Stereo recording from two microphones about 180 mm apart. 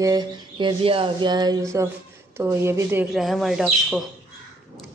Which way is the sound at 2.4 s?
15° right (ahead or behind).